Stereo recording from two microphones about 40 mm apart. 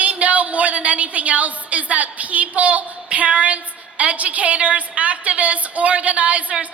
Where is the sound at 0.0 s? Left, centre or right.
Right.